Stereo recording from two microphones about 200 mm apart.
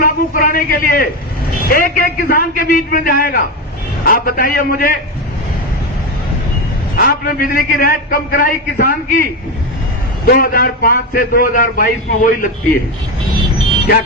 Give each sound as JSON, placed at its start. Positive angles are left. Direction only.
{"t": 0.0, "sound": "a man's voice", "side_deg": 45}
{"t": 6.9, "sound": "a man's voice", "side_deg": 45}
{"t": 10.2, "sound": "a man's voice", "side_deg": 45}